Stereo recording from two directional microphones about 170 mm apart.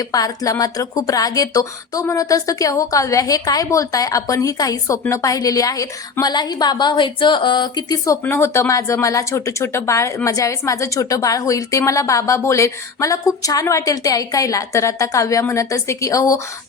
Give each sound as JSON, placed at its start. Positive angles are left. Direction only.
{"t": 0.0, "sound": "speech", "side_deg": 20}